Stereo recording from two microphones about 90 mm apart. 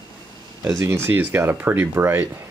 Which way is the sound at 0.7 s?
30° right (ahead or behind).